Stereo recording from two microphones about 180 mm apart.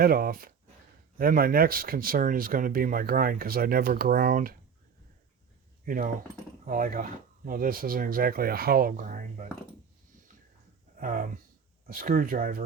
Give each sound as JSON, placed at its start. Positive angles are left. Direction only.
{"t": 0.0, "sound": "speech", "side_deg": -55}
{"t": 5.8, "sound": "speech", "side_deg": -50}
{"t": 10.9, "sound": "speech", "side_deg": -50}